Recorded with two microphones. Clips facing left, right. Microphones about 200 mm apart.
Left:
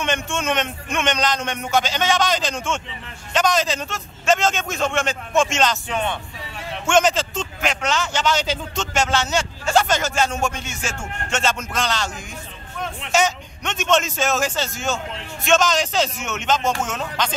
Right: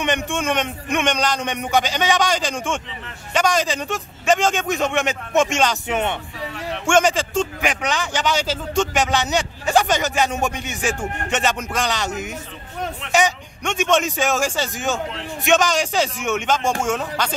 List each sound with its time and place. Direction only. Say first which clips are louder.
0.0 s a man's voice: right 2 dB; 15° right (ahead or behind)